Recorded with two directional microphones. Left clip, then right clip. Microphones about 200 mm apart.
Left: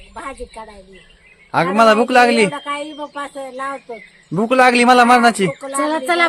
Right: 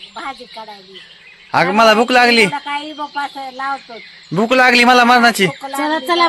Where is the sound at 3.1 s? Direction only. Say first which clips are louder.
Right 6 dB; 35° left (ahead or behind).